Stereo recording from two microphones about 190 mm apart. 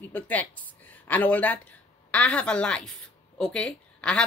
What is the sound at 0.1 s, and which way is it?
A woman's voice, 10° left (ahead or behind).